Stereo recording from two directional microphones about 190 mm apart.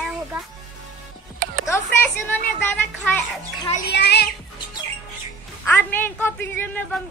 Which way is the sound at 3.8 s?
60° left (ahead or behind).